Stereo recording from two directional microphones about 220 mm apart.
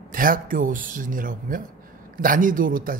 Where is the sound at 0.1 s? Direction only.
40° right (ahead or behind).